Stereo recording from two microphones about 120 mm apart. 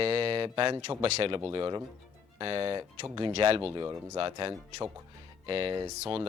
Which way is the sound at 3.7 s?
30° right (ahead or behind).